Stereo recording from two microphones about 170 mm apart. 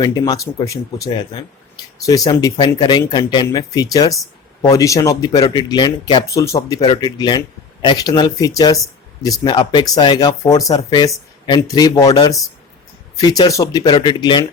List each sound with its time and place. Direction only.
0.0 s speech: 20° left (ahead or behind)